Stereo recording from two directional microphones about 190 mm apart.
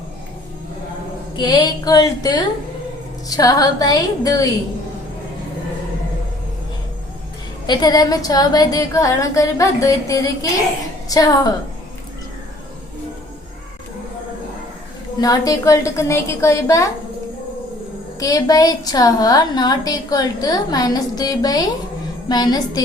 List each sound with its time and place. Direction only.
1.4 s a woman's voice: 20° left (ahead or behind)
7.7 s a woman's voice: 20° left (ahead or behind)
15.2 s a woman's voice: 20° left (ahead or behind)
18.2 s a woman's voice: 20° left (ahead or behind)